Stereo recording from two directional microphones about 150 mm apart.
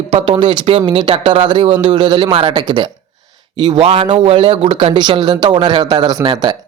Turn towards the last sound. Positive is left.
turn(degrees=-30)  # may be behind; listen again after turning